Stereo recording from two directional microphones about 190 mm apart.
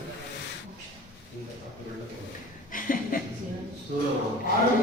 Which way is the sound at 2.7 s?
45° left (ahead or behind).